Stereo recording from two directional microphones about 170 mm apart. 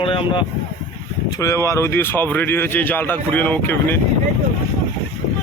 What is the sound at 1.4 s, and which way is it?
Speech, 20° left (ahead or behind).